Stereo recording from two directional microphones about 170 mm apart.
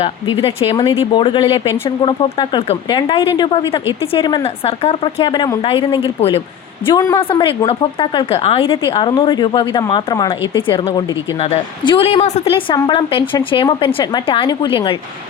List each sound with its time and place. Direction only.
0.0 s a woman's voice: 35° left (ahead or behind)